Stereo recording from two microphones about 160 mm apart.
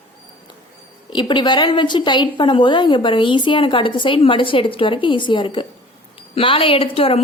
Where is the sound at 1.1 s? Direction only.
30° left (ahead or behind).